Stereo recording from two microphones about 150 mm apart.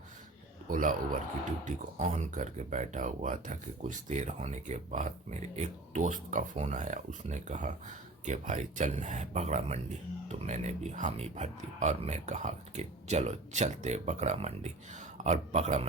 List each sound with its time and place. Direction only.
0.7 s speech: 60° right (ahead or behind); by 15.9 s 45° right (ahead or behind)